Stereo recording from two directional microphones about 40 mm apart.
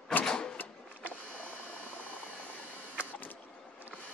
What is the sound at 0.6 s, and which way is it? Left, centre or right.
Printer, left.